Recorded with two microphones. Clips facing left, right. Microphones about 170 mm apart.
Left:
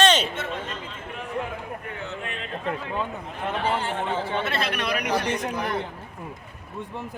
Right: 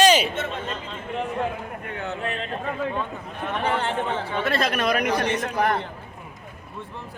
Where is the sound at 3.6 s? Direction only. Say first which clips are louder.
Right 2 dB; 60° right (ahead or behind).